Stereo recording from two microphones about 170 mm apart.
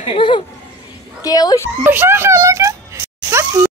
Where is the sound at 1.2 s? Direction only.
20° left (ahead or behind).